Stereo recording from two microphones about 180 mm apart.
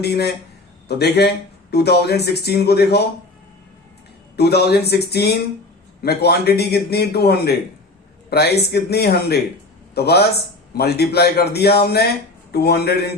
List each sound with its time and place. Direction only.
0.9 s a man's voice: 65° left (ahead or behind)
4.4 s a man's voice: 65° left (ahead or behind)